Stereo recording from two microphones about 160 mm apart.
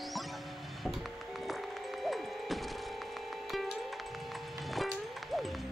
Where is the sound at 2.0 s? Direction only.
Centre (ahead or behind).